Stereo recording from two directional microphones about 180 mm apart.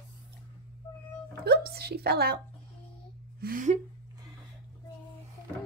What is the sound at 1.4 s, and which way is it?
Speech, 60° right (ahead or behind).